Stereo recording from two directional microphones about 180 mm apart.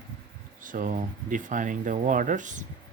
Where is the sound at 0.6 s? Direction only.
45° right (ahead or behind).